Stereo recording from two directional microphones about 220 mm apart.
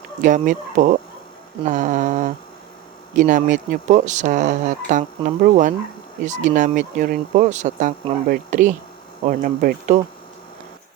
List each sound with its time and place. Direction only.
0.2 s speech: 35° right (ahead or behind)